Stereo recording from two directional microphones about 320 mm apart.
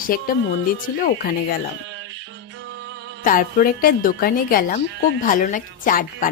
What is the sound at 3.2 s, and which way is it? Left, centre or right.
A woman's voice, left.